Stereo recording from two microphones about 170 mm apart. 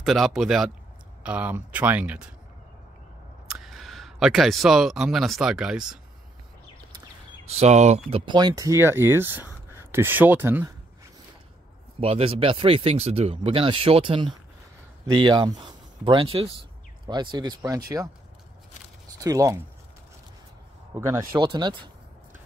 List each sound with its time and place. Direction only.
0.0 s a man's voice: centre (ahead or behind)
3.4 s speech: centre (ahead or behind)
7.4 s speech: 40° right (ahead or behind)
8.3 s speech: 25° right (ahead or behind)
12.0 s speech: 35° right (ahead or behind)
19.1 s speech: 20° right (ahead or behind)
20.9 s speech: 15° right (ahead or behind)
21.4 s speech: 25° right (ahead or behind)